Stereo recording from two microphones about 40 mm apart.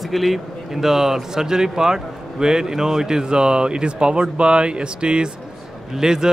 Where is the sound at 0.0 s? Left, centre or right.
Centre.